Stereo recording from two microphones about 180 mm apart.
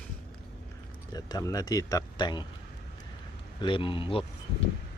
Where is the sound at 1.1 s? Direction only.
20° left (ahead or behind).